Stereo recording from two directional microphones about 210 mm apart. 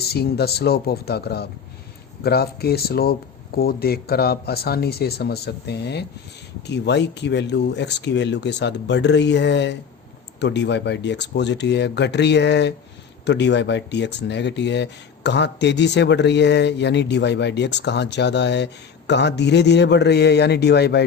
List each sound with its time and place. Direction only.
0.1 s speech: 50° left (ahead or behind)